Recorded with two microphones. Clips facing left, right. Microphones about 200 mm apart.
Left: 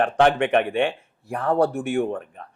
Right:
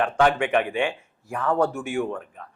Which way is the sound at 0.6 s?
55° left (ahead or behind).